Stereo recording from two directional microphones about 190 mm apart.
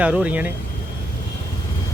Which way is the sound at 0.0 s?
5° right (ahead or behind).